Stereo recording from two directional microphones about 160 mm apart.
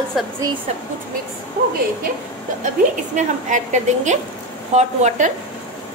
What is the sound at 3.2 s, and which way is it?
A woman's voice, 50° right (ahead or behind).